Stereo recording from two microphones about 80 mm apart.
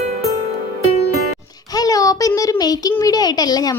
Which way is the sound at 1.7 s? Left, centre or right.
Left.